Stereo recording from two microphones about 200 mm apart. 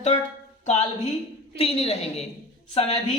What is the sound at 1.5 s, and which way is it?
A woman's voice, 30° left (ahead or behind).